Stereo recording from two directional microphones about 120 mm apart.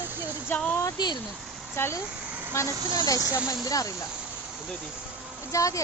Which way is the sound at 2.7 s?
40° right (ahead or behind).